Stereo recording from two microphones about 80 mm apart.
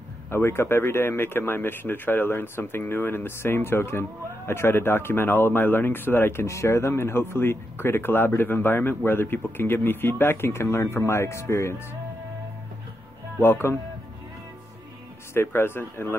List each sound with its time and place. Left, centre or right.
0.3 s speech: left
13.4 s speech: left
15.3 s speech: left